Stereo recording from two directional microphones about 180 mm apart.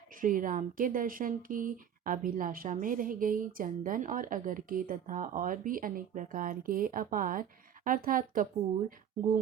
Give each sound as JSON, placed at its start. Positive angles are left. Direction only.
{"t": 0.1, "sound": "speech", "side_deg": -50}